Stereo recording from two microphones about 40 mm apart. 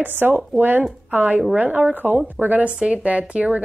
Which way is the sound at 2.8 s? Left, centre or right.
Right.